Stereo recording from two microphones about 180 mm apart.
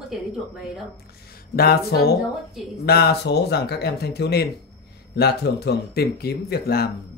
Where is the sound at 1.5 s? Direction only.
60° left (ahead or behind).